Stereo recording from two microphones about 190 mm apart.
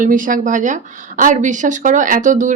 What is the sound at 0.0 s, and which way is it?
Speech, 45° right (ahead or behind).